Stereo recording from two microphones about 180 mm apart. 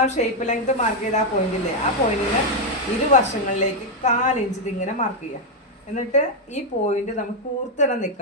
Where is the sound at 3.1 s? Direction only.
45° left (ahead or behind).